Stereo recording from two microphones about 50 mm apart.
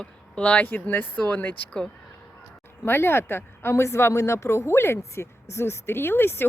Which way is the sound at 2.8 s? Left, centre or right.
Left.